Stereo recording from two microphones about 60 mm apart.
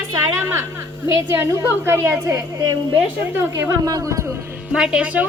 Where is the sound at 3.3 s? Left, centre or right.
Right.